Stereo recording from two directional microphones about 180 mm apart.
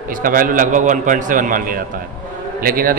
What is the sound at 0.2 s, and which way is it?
A man's voice, 50° right (ahead or behind).